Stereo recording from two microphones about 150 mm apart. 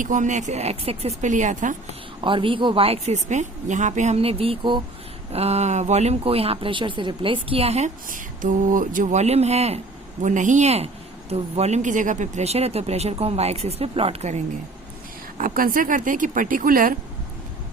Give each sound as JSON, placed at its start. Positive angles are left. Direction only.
{"t": 0.0, "sound": "speech", "side_deg": -60}
{"t": 2.2, "sound": "a woman's voice", "side_deg": -35}
{"t": 8.0, "sound": "speech", "side_deg": -60}
{"t": 10.2, "sound": "speech", "side_deg": -55}
{"t": 15.4, "sound": "speech", "side_deg": -70}